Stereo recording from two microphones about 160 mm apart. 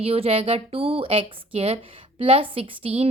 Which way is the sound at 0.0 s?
40° right (ahead or behind).